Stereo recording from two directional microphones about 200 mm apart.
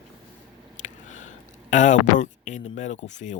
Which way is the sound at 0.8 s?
40° left (ahead or behind).